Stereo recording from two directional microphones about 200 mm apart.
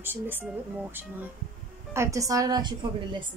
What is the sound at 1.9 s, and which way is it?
Speech, 15° right (ahead or behind).